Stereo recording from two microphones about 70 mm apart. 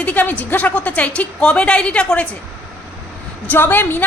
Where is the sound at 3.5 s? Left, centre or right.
Left.